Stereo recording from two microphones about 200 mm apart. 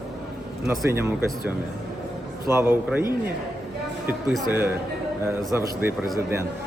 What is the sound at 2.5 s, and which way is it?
Speech, 10° right (ahead or behind).